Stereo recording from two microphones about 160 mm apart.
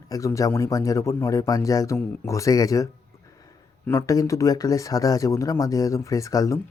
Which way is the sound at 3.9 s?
20° left (ahead or behind).